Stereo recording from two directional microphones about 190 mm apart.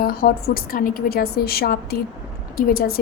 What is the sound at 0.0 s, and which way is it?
A woman's voice, 50° left (ahead or behind).